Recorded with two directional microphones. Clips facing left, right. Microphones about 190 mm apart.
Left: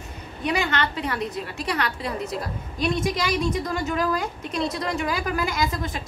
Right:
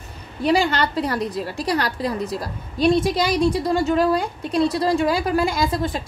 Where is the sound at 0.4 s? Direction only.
35° right (ahead or behind).